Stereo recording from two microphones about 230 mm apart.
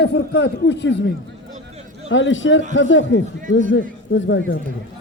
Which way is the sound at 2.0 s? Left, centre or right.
Left.